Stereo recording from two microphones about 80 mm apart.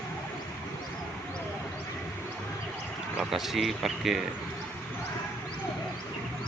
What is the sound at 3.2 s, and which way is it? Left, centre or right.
A man's voice, centre.